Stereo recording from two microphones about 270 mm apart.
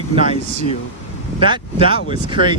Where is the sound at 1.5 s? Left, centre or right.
Centre.